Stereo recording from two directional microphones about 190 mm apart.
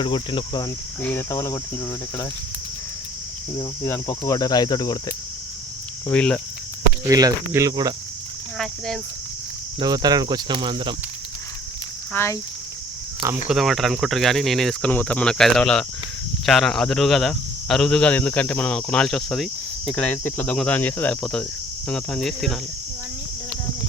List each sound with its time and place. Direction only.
0.0 s speech: 25° left (ahead or behind)
1.0 s speech: 15° left (ahead or behind)
3.6 s speech: 15° left (ahead or behind)
6.1 s speech: 5° left (ahead or behind)
7.1 s speech: 20° right (ahead or behind)
8.5 s speech: centre (ahead or behind)
9.8 s speech: 20° right (ahead or behind)
12.1 s speech: 15° left (ahead or behind)
13.1 s speech: 15° right (ahead or behind)
13.5 s speech: centre (ahead or behind)